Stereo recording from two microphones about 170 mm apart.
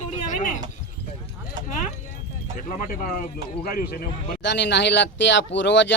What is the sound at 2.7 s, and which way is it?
Speech, 55° left (ahead or behind).